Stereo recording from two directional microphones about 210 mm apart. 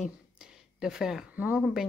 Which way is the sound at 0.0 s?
5° right (ahead or behind).